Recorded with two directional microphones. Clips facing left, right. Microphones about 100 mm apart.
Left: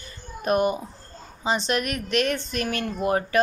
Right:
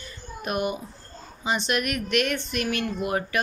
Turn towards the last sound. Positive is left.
turn(degrees=35)  # may be behind; listen again after turning